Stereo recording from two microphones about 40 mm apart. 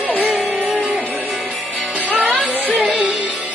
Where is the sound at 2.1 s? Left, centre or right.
Right.